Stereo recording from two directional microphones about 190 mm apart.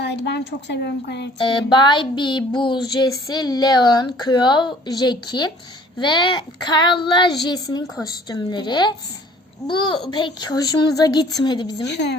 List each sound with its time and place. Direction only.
0.0 s a woman's voice: 65° left (ahead or behind)
1.4 s a sound: 25° left (ahead or behind)
11.9 s a woman's voice: 65° left (ahead or behind)